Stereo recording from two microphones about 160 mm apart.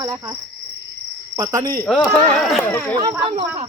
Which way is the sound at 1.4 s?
25° right (ahead or behind).